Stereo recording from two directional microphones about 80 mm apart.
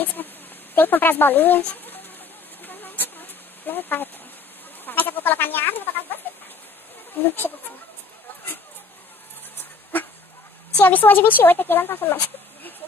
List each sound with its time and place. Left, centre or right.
0.0 s a woman's voice: left
2.6 s a sound: left
4.8 s goat: left
6.2 s chicken: left
7.2 s a woman's voice: left
10.8 s a woman's voice: left